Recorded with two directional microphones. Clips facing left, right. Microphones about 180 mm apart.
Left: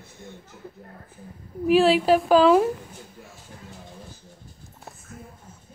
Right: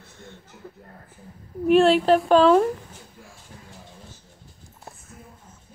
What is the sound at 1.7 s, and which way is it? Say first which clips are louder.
A woman's voice: right 1 dB; centre (ahead or behind).